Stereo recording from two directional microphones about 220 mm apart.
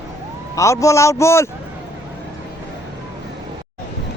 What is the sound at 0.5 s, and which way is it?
Speech, 15° left (ahead or behind).